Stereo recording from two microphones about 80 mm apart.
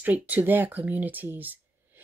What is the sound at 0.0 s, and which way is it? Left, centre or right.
Speech, right.